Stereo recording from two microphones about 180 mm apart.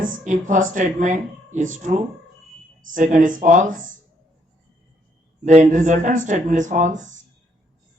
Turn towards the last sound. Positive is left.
turn(degrees=-45)  # may be behind; listen again after turning